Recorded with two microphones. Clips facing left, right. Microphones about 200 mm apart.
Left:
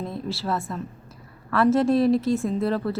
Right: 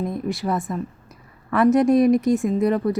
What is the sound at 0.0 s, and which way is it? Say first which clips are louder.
A woman's voice: right 5 dB; 15° right (ahead or behind).